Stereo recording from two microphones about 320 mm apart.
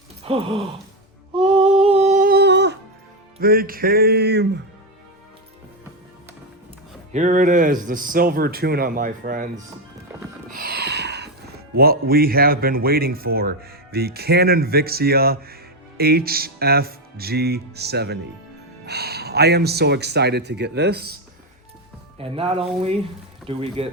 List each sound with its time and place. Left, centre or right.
0.3 s speech: centre
1.3 s humming: centre; by 2.7 s right
3.4 s speech: right
7.1 s speech: right
10.5 s a sound: right
11.8 s speech: right
22.2 s speech: centre